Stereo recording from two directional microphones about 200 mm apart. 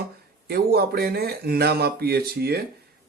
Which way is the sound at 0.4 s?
50° right (ahead or behind).